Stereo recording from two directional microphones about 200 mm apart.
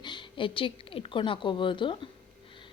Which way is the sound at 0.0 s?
25° left (ahead or behind).